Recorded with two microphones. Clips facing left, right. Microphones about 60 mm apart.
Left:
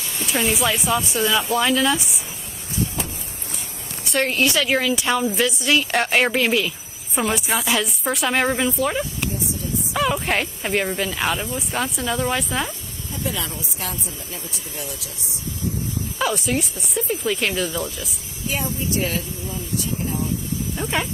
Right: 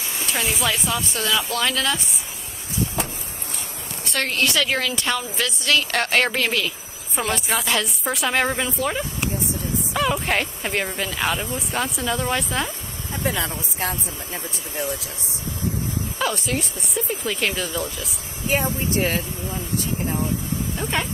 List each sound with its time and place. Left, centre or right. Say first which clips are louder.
0.3 s speech: left 3 dB; centre
4.3 s a woman's voice: left 1 dB; centre
13.1 s speech: right 2 dB; right
16.2 s speech: left 3 dB; centre
18.5 s speech: right 3 dB; right
20.7 s speech: left 2 dB; centre